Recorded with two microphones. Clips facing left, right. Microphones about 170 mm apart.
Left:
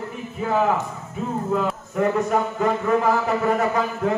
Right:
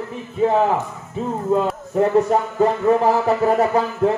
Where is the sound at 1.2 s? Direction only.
30° right (ahead or behind).